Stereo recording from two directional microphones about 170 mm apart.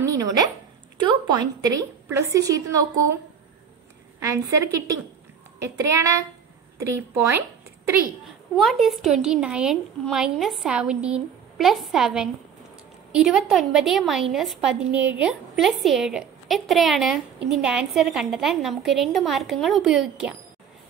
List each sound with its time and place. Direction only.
0.0 s dog: 20° right (ahead or behind)
1.0 s a woman's voice: 25° right (ahead or behind)
4.2 s a woman's voice: 20° right (ahead or behind)
8.5 s a woman's voice: centre (ahead or behind)